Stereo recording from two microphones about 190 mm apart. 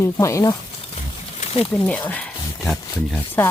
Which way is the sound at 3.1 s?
10° left (ahead or behind).